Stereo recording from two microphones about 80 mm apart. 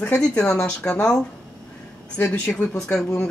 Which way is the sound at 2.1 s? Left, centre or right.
Left.